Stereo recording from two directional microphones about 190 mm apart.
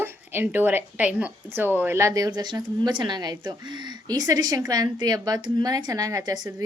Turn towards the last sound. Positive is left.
turn(degrees=-20)  # may be behind; listen again after turning